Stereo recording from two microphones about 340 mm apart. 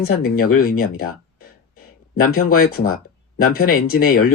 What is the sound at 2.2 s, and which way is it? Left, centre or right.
Speech, left.